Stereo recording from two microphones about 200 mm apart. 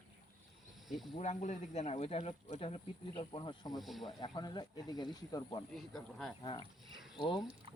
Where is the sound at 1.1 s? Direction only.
35° left (ahead or behind).